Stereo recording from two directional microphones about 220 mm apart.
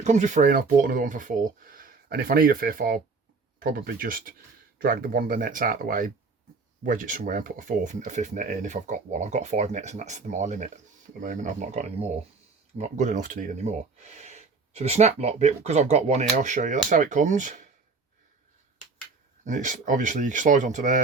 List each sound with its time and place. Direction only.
0.0 s speech: 35° right (ahead or behind)
19.5 s speech: 35° right (ahead or behind)